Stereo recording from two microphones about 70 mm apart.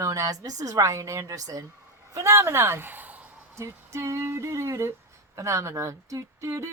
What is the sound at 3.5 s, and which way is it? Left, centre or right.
Speech, right.